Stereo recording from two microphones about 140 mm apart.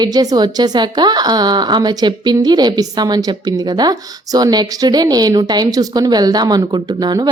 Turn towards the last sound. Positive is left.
turn(degrees=-30)  # may be behind; listen again after turning